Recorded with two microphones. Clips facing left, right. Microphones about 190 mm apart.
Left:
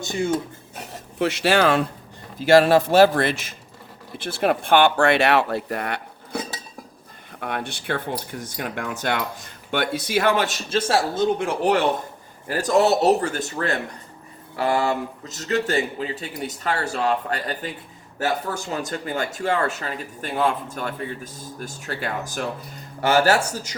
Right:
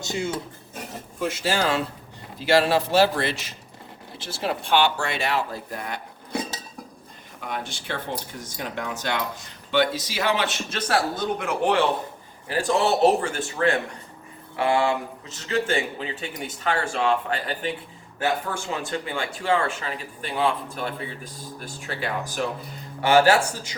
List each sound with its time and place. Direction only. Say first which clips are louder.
1.2 s speech: left 6 dB; 75° left (ahead or behind)
2.4 s speech: left 5 dB; 50° left (ahead or behind); by 6.0 s 65° left (ahead or behind)
7.3 s speech: left 3 dB; 60° left (ahead or behind); by 10.6 s 45° left (ahead or behind)
10.7 s a man's voice: left 4 dB; 25° left (ahead or behind); by 23.7 s 40° left (ahead or behind)